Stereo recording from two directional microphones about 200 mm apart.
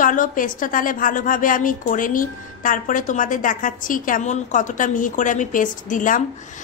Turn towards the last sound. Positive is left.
turn(degrees=40)  # may be behind; listen again after turning